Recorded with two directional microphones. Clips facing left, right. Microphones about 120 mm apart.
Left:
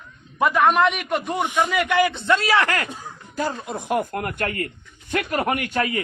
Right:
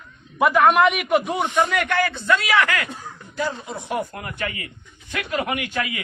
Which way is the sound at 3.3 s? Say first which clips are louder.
Left 1 dB; 45° left (ahead or behind).